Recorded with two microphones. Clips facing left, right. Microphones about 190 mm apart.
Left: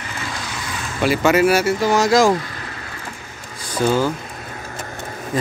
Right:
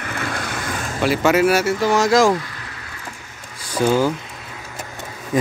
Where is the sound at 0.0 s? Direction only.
60° right (ahead or behind).